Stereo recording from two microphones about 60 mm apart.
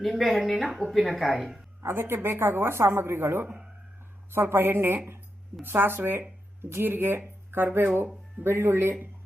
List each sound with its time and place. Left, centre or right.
0.0 s a woman's voice: centre
1.8 s a woman's voice: right